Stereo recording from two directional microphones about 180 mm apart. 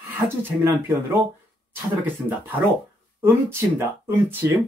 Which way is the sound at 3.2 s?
15° right (ahead or behind).